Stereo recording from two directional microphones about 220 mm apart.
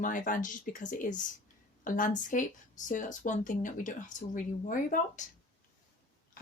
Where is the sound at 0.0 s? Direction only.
35° left (ahead or behind).